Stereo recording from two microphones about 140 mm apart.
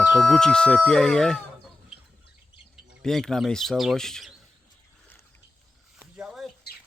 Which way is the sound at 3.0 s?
5° left (ahead or behind).